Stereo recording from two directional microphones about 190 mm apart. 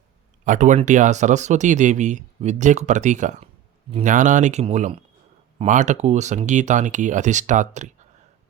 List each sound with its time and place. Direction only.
0.4 s speech: 40° right (ahead or behind)